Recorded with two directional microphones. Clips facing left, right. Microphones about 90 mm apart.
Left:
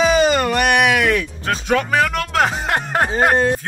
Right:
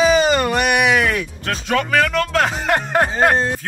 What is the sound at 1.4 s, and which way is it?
Speech, 20° left (ahead or behind).